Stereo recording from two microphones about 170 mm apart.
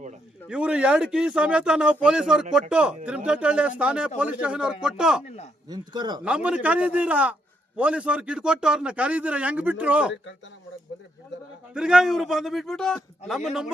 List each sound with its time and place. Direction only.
0.4 s a man's voice: 5° right (ahead or behind)
5.6 s a man's voice: 25° right (ahead or behind)
6.2 s a man's voice: 5° right (ahead or behind)
11.7 s speech: 5° right (ahead or behind)